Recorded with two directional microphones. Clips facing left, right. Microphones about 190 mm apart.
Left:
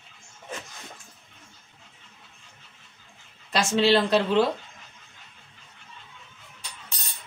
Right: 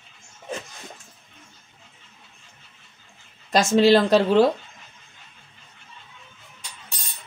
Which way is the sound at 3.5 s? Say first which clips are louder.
Right 5 dB; 45° right (ahead or behind).